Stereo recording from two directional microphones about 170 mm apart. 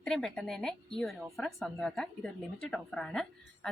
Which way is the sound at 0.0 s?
Centre (ahead or behind).